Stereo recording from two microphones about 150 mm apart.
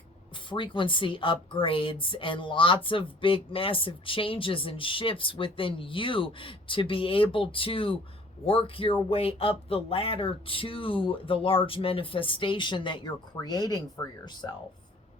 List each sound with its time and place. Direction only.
0.5 s a woman's voice: 35° left (ahead or behind)